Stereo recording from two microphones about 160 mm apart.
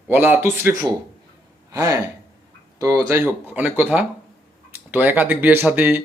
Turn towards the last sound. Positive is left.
turn(degrees=-10)  # may be behind; listen again after turning